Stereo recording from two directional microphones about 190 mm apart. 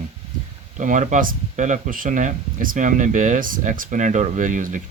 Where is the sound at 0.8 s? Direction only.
40° right (ahead or behind).